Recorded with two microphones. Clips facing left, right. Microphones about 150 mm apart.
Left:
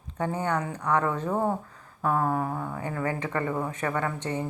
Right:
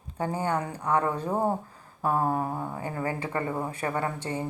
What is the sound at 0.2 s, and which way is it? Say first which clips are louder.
Speech: even; 30° right (ahead or behind).